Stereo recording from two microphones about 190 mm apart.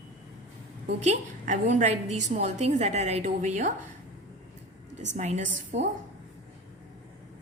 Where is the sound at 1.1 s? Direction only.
40° right (ahead or behind).